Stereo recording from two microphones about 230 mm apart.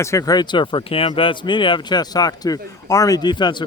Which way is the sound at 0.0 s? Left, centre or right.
Centre.